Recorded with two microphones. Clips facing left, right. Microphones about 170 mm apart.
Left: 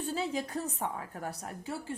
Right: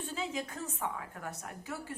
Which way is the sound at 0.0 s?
35° left (ahead or behind).